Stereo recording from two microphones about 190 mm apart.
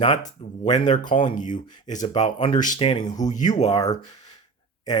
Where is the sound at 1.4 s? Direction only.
40° left (ahead or behind); by 3.9 s 20° left (ahead or behind).